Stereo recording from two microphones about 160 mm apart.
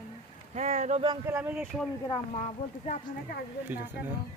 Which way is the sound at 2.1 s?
45° left (ahead or behind).